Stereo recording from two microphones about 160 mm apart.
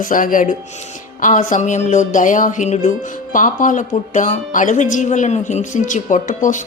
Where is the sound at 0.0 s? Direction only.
60° left (ahead or behind).